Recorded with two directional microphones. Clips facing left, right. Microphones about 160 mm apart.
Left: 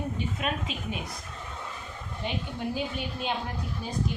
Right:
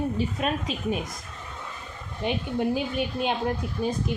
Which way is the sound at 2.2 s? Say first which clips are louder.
Right 6 dB; 55° right (ahead or behind).